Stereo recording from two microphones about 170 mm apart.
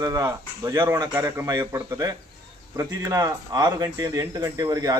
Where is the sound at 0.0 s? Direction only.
20° right (ahead or behind).